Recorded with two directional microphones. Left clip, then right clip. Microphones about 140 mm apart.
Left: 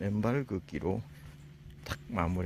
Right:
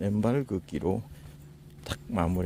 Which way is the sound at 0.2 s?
30° right (ahead or behind).